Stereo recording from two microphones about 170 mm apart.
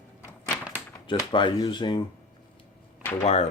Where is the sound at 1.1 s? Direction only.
30° left (ahead or behind).